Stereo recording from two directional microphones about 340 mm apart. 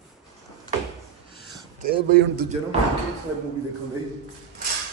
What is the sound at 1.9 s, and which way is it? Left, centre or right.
Speech, right.